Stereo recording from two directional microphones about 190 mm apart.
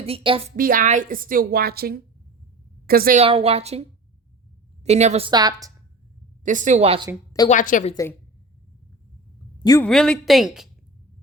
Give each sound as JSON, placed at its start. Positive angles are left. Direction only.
{"t": 0.0, "sound": "speech", "side_deg": -30}
{"t": 0.5, "sound": "a woman's voice", "side_deg": -50}
{"t": 3.2, "sound": "speech", "side_deg": -30}
{"t": 5.3, "sound": "a woman's voice", "side_deg": -20}
{"t": 6.4, "sound": "speech", "side_deg": -40}
{"t": 7.4, "sound": "a woman's voice", "side_deg": 45}
{"t": 9.8, "sound": "a woman's voice", "side_deg": 5}